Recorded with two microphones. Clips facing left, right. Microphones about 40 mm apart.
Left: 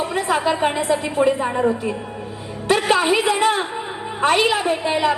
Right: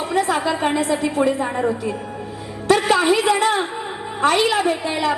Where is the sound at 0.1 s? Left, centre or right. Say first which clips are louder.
Right 4 dB; centre.